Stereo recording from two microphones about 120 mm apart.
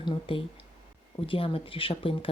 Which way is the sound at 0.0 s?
45° left (ahead or behind).